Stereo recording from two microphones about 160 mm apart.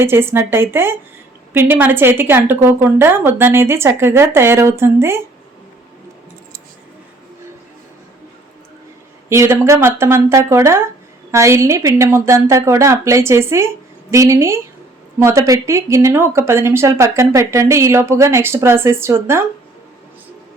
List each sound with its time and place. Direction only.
0.0 s speech: 15° right (ahead or behind)
9.3 s speech: 15° right (ahead or behind)